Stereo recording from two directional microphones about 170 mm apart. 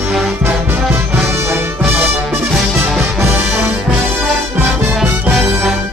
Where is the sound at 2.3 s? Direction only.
5° right (ahead or behind).